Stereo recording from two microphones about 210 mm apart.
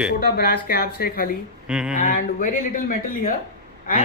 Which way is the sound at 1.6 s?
5° right (ahead or behind).